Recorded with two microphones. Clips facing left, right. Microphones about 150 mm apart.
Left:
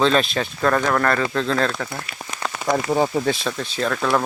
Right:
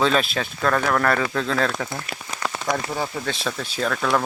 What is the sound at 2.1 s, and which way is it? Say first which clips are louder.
Rain on surface: right 2 dB; 45° right (ahead or behind).